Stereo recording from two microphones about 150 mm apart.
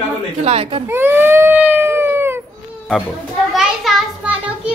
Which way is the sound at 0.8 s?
15° right (ahead or behind).